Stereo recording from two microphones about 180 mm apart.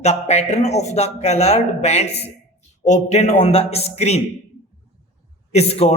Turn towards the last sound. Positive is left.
turn(degrees=35)  # may be behind; listen again after turning